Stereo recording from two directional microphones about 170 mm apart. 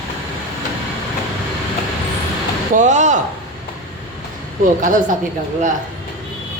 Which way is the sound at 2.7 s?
45° right (ahead or behind).